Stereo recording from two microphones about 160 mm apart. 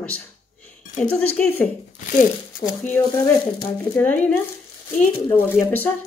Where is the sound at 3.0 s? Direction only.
25° left (ahead or behind).